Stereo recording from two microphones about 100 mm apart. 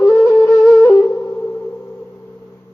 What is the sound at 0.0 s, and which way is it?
Wind instrument, 30° left (ahead or behind).